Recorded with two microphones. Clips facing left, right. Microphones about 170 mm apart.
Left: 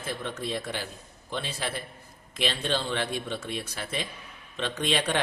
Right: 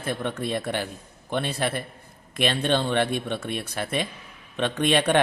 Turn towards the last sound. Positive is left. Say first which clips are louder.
# right 7 dB
turn(degrees=-55)  # may be behind; listen again after turning